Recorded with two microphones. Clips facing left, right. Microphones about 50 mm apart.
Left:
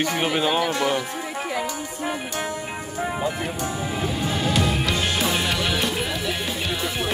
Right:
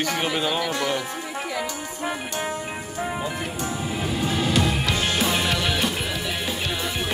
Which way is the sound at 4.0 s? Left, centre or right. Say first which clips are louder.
Right 1 dB; centre.